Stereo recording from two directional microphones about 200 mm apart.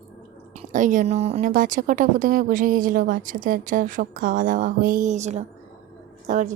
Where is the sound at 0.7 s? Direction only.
40° right (ahead or behind).